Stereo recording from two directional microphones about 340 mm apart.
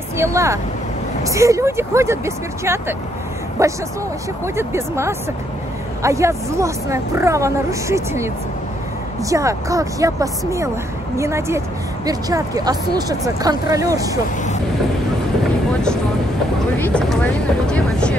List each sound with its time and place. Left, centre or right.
0.2 s speech: centre
9.3 s speech: centre
16.7 s speech: centre